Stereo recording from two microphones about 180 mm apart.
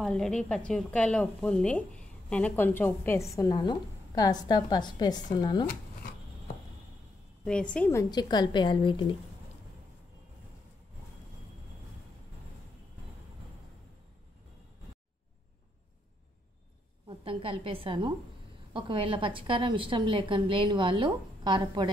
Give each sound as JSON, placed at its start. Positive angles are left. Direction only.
{"t": 0.0, "sound": "a woman's voice", "side_deg": 5}
{"t": 7.4, "sound": "a woman's voice", "side_deg": 5}
{"t": 17.2, "sound": "a woman's voice", "side_deg": -30}